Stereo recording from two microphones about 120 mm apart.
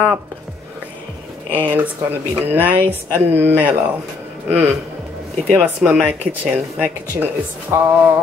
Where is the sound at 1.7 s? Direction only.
15° right (ahead or behind).